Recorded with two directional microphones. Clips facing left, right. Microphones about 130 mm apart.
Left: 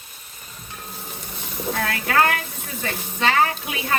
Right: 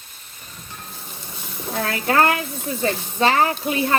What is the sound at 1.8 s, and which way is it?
Speech, 30° right (ahead or behind).